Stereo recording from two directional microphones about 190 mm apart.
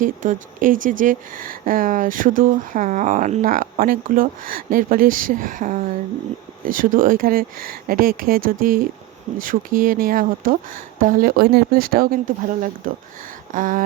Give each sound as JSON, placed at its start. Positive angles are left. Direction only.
{"t": 0.0, "sound": "speech", "side_deg": -45}